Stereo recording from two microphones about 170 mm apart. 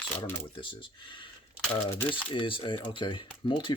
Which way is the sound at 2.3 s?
30° left (ahead or behind).